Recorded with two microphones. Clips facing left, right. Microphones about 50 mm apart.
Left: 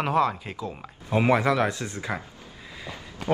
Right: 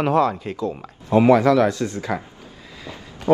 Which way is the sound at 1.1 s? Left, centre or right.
Left.